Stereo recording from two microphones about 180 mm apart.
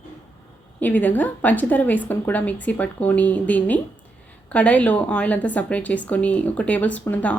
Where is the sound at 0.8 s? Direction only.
10° left (ahead or behind).